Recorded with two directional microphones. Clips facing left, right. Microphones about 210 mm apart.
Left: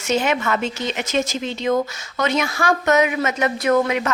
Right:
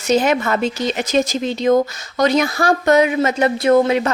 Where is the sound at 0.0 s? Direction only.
35° right (ahead or behind).